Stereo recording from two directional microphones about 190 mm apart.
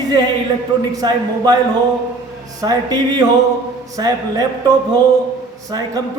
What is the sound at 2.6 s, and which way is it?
A man's voice, 20° right (ahead or behind).